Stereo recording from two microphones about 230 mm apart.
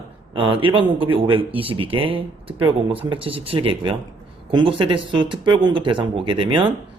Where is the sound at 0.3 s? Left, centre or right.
Right.